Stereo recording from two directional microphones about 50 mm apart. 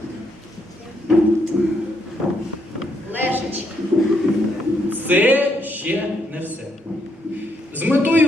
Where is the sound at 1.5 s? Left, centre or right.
Centre.